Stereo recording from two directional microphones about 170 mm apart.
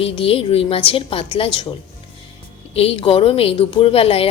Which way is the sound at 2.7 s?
35° left (ahead or behind).